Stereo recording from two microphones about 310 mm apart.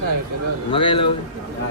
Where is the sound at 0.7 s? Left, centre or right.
Centre.